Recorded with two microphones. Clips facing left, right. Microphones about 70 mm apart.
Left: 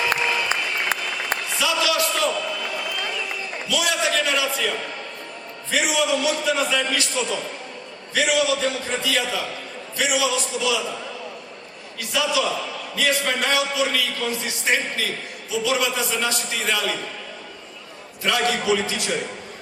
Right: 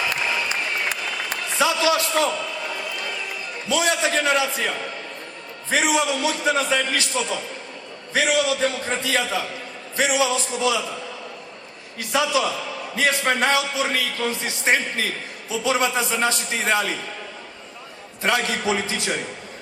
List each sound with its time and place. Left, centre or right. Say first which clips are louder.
0.1 s applause: left 2 dB; left
1.5 s a sound: right 3 dB; right
3.7 s a man's voice: right 2 dB; right
5.7 s a man's voice: right 1 dB; right
11.9 s a man's voice: right 2 dB; right
18.2 s a man's voice: even; right